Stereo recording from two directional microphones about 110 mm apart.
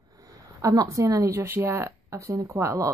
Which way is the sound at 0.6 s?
30° right (ahead or behind).